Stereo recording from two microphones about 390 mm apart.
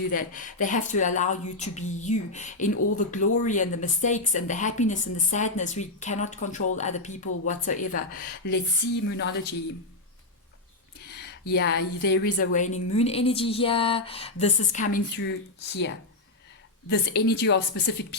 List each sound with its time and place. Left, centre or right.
0.1 s a woman's voice: centre
11.0 s a sound: left
12.0 s a woman's voice: left